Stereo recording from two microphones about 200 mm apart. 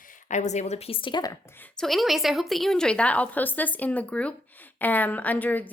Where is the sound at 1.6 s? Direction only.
Centre (ahead or behind).